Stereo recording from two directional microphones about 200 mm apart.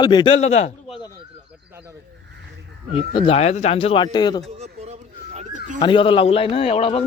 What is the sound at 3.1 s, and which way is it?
A man's voice, 25° left (ahead or behind).